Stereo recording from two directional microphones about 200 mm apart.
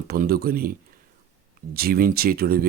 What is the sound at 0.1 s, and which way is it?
Speech, 50° right (ahead or behind).